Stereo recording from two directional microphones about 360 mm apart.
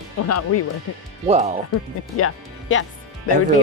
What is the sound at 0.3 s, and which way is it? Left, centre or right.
Speech, left.